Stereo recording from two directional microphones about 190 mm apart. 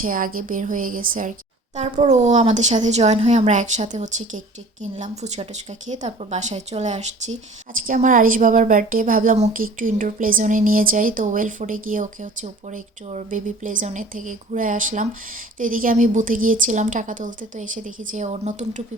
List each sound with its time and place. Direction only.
0.0 s a woman's voice: 45° right (ahead or behind)